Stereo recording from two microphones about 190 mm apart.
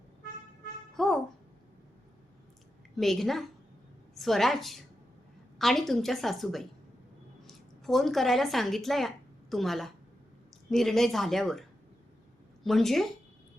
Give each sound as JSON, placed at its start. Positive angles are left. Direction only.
{"t": 0.9, "sound": "babbling", "side_deg": 0}
{"t": 2.9, "sound": "a woman's voice", "side_deg": 0}
{"t": 12.6, "sound": "a woman's voice", "side_deg": 0}